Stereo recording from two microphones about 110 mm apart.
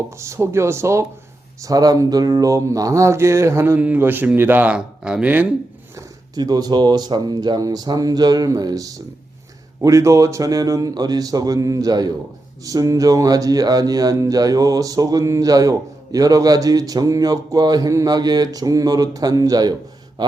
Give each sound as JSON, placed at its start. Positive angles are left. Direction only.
{"t": 0.2, "sound": "speech", "side_deg": -25}
{"t": 6.3, "sound": "speech", "side_deg": -35}
{"t": 20.2, "sound": "a sound", "side_deg": -40}